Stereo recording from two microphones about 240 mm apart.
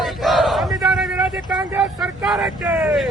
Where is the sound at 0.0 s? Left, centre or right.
Centre.